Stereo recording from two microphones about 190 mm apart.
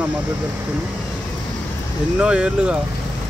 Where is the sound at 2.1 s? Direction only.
5° right (ahead or behind).